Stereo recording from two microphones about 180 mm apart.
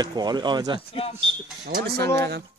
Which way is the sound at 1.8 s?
60° right (ahead or behind).